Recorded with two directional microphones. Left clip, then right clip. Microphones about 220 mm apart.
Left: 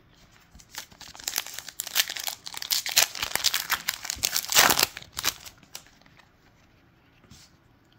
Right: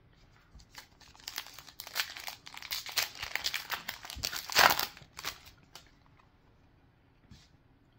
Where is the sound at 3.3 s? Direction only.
20° left (ahead or behind).